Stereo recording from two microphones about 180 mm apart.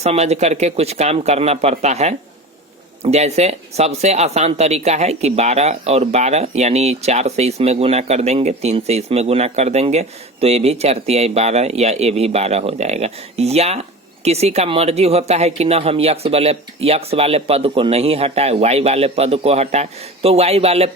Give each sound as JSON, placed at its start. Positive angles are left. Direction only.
{"t": 0.0, "sound": "speech", "side_deg": -35}